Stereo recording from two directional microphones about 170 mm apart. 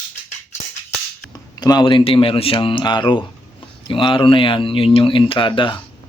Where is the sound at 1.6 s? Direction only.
25° left (ahead or behind).